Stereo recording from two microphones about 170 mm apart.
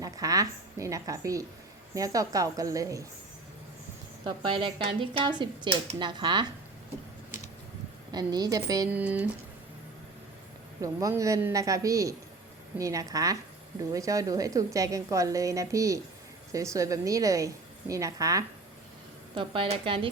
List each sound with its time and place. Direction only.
0.0 s a woman's voice: 20° right (ahead or behind)
4.3 s speech: 30° right (ahead or behind)
8.1 s speech: 25° right (ahead or behind)
8.9 s speech: 10° right (ahead or behind)
10.8 s speech: 20° right (ahead or behind)
19.3 s a woman's voice: 30° right (ahead or behind)